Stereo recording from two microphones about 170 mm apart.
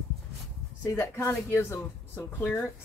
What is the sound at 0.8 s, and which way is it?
Speech, 20° left (ahead or behind).